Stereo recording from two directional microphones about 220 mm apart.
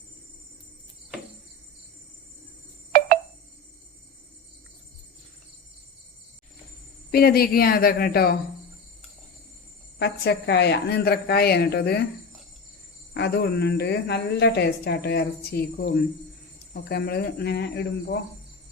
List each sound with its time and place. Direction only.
7.1 s a woman's voice: 45° left (ahead or behind)
10.0 s a woman's voice: 50° left (ahead or behind)
13.1 s a woman's voice: 50° left (ahead or behind)
16.9 s a woman's voice: 45° left (ahead or behind)